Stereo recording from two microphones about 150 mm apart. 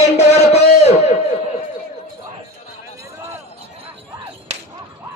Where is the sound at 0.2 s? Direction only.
45° left (ahead or behind).